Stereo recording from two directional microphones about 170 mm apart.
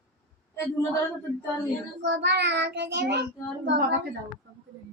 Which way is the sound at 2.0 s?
85° right.